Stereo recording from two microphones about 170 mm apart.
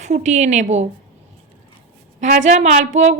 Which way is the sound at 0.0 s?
45° right (ahead or behind).